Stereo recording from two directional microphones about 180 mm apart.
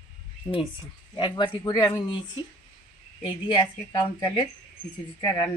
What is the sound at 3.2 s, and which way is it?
Speech, 25° left (ahead or behind).